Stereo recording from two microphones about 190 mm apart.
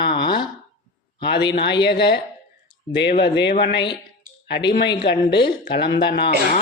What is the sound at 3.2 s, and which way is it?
Speech, 60° left (ahead or behind).